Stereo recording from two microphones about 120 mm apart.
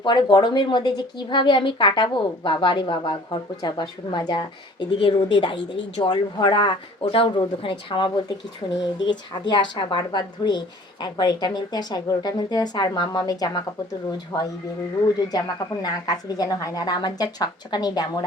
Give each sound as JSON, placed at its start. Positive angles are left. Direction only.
{"t": 0.0, "sound": "a woman's voice", "side_deg": 40}
{"t": 14.3, "sound": "speech", "side_deg": 20}
{"t": 15.0, "sound": "a woman's voice", "side_deg": 35}